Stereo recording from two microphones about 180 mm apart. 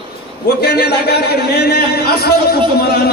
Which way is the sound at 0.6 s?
65° left (ahead or behind).